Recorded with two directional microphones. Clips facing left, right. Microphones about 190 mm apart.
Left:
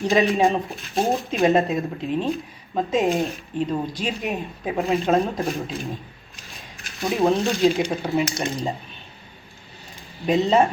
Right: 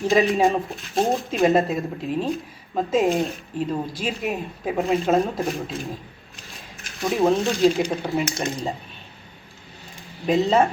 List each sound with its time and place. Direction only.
0.0 s speech: centre (ahead or behind)
7.0 s speech: centre (ahead or behind)
10.2 s speech: centre (ahead or behind)